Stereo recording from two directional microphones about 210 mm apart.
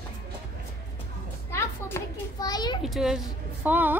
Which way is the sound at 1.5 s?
15° left (ahead or behind).